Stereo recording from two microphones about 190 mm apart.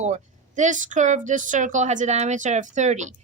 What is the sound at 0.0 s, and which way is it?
A woman's voice, 40° right (ahead or behind).